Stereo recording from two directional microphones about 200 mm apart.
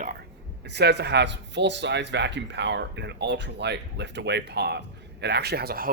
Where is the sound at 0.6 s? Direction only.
55° right (ahead or behind).